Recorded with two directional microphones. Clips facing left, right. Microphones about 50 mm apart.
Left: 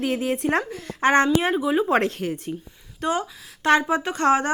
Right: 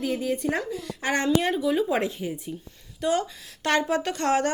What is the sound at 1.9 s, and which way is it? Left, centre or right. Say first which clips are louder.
Speech: left 5 dB; left.